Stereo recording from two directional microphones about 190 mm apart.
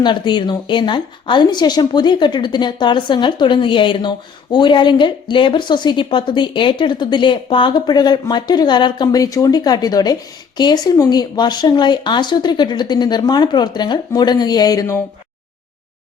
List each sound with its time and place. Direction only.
0.0 s a woman's voice: 25° left (ahead or behind)